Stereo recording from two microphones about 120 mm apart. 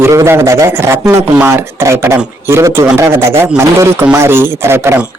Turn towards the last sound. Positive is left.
turn(degrees=-20)  # may be behind; listen again after turning